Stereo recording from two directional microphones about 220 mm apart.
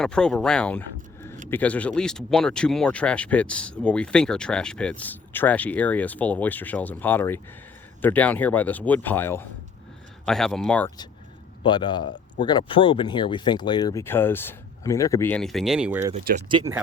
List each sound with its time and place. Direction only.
0.0 s speech: 5° left (ahead or behind)
10.8 s speech: 20° left (ahead or behind); by 16.1 s 10° right (ahead or behind)
16.5 s speech: 20° right (ahead or behind)